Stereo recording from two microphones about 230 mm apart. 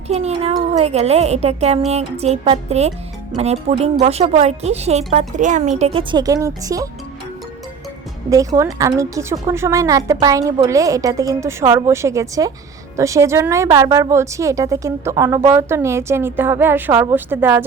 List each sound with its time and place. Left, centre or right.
0.1 s speech: right
8.3 s a woman's voice: centre